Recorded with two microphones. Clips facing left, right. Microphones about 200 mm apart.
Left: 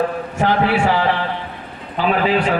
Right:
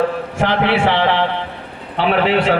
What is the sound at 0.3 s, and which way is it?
A man's voice, 70° right (ahead or behind).